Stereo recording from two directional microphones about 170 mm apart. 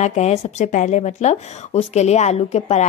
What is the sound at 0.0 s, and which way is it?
A woman's voice, 40° left (ahead or behind).